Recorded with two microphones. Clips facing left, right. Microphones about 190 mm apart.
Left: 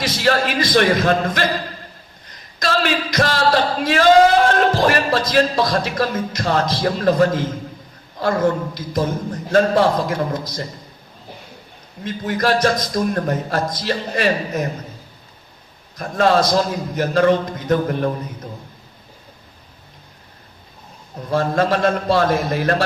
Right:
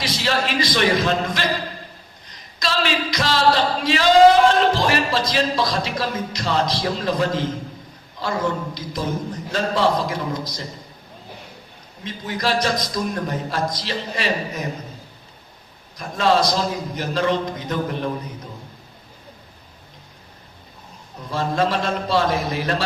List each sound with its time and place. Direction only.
0.0 s chant: 50° left (ahead or behind)
2.6 s chant: 50° left (ahead or behind)
12.0 s chant: 55° left (ahead or behind)
16.0 s chant: 50° left (ahead or behind)
21.2 s chant: 50° left (ahead or behind)